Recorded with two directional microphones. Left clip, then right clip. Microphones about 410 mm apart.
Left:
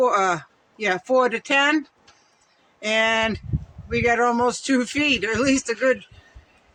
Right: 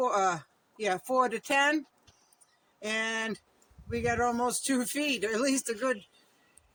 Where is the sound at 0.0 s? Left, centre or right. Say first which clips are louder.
Left 8 dB; right.